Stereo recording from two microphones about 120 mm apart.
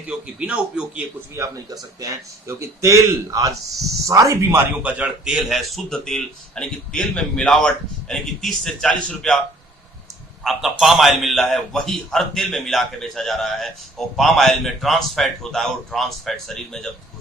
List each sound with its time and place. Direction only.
0.1 s speech: 10° right (ahead or behind)
1.4 s a man's voice: 30° right (ahead or behind)
4.8 s speech: 10° right (ahead or behind); by 9.4 s 5° left (ahead or behind)
10.4 s speech: centre (ahead or behind)